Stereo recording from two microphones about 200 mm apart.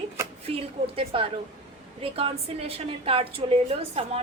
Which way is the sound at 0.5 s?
30° right (ahead or behind).